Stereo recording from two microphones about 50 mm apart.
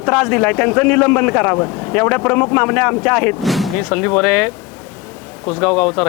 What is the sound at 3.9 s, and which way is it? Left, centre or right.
A man's voice, centre.